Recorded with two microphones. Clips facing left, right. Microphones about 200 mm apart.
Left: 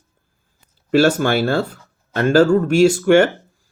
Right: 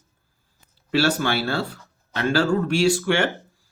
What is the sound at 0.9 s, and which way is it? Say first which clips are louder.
Speech: left 7 dB; 50° left (ahead or behind).